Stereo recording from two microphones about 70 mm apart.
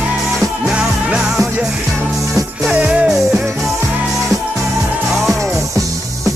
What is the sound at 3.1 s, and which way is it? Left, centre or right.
Music, centre.